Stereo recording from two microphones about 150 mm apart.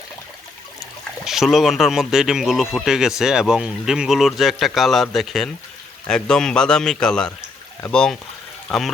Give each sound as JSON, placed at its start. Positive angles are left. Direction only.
{"t": 1.2, "sound": "speech", "side_deg": 0}